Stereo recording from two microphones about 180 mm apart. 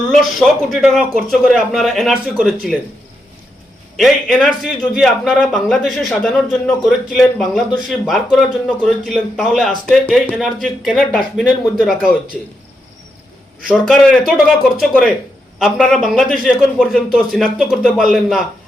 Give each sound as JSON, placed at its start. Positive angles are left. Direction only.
{"t": 0.1, "sound": "speech", "side_deg": 0}
{"t": 3.9, "sound": "speech", "side_deg": 0}
{"t": 13.7, "sound": "speech", "side_deg": 0}